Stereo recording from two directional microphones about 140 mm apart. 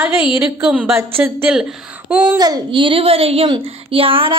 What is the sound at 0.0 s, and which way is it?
A woman's voice, 10° right (ahead or behind).